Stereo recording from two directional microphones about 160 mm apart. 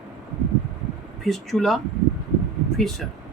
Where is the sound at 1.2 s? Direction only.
Centre (ahead or behind).